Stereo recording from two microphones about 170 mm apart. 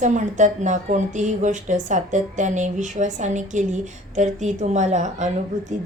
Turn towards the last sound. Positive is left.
turn(degrees=-45)  # may be behind; listen again after turning